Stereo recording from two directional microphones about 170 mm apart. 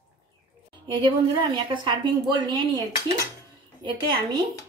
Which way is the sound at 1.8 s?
30° right (ahead or behind).